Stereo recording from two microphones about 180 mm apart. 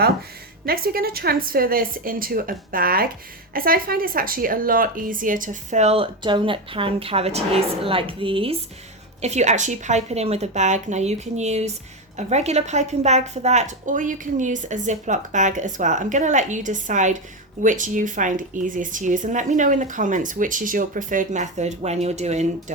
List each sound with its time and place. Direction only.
0.6 s a woman's voice: 55° right (ahead or behind); by 22.4 s 40° right (ahead or behind)